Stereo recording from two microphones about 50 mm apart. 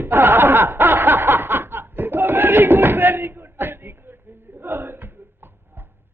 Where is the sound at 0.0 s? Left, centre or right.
Right.